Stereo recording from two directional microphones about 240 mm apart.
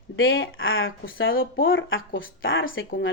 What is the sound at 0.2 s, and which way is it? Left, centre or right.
Speech, left.